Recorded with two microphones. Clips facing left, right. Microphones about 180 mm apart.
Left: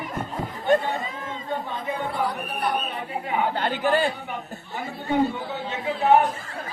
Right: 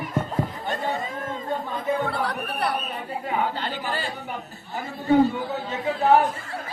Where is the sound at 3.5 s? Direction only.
55° left (ahead or behind).